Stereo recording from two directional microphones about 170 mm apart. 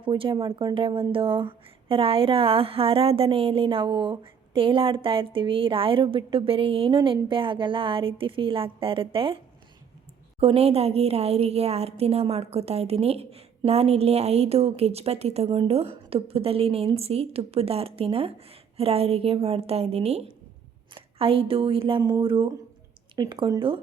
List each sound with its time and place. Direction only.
0.0 s speech: 30° right (ahead or behind)
10.4 s speech: 35° right (ahead or behind)